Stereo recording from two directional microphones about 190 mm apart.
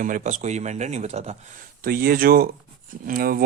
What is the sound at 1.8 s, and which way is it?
Speech, 50° right (ahead or behind).